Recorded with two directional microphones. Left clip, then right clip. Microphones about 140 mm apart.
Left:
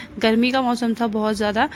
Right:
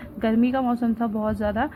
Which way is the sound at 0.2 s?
35° left (ahead or behind).